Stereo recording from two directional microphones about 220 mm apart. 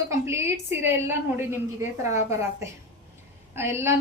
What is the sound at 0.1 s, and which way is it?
A woman's voice, 10° right (ahead or behind).